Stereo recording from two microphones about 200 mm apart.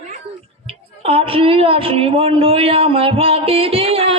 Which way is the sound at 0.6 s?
30° right (ahead or behind).